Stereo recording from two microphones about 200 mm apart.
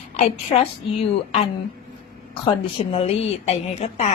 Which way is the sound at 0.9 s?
30° left (ahead or behind).